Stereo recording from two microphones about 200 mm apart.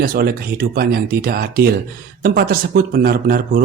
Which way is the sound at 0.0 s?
45° right (ahead or behind).